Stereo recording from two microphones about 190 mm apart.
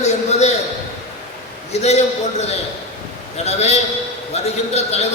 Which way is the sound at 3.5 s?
35° left (ahead or behind).